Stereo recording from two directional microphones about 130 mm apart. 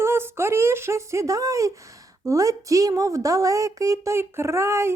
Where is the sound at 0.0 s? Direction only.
20° right (ahead or behind).